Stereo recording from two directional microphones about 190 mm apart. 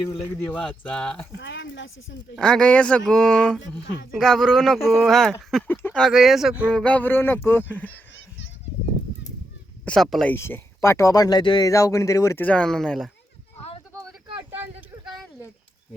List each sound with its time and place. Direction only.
0.5 s speech: 5° left (ahead or behind)
1.4 s a sound: 70° left (ahead or behind)
2.3 s speech: 5° left (ahead or behind)
6.7 s speech: 5° left (ahead or behind)
9.8 s speech: 5° left (ahead or behind)
10.3 s speech: 15° left (ahead or behind)
14.8 s a sound: centre (ahead or behind)